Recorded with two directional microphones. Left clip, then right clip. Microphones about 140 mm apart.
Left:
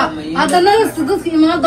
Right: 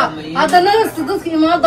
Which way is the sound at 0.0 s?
20° right (ahead or behind).